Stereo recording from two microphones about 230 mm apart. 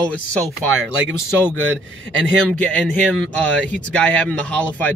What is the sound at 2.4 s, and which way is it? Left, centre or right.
Speech, centre.